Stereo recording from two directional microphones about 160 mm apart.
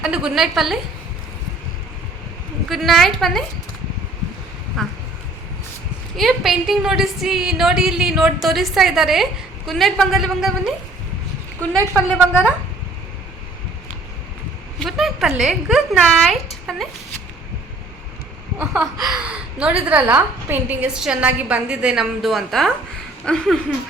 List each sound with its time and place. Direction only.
0.0 s a woman's voice: 5° right (ahead or behind)
2.6 s a woman's voice: centre (ahead or behind)
4.7 s speech: centre (ahead or behind)
6.1 s a woman's voice: centre (ahead or behind)
12.0 s a woman's voice: centre (ahead or behind)
14.8 s a woman's voice: centre (ahead or behind)
18.6 s speech: 20° right (ahead or behind)
19.0 s a woman's voice: 5° right (ahead or behind)